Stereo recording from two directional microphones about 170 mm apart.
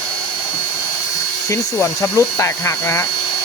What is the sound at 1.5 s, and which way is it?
Speech, 15° left (ahead or behind).